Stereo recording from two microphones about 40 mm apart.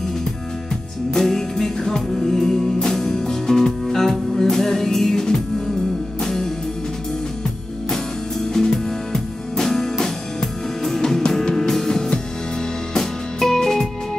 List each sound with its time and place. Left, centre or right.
1.1 s music: centre
7.9 s music: centre